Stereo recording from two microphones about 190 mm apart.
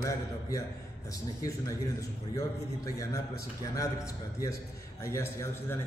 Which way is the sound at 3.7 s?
15° left (ahead or behind).